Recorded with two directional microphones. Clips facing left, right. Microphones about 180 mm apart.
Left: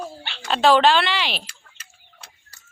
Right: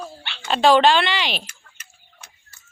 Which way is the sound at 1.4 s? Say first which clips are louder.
Right 1 dB; 35° left (ahead or behind).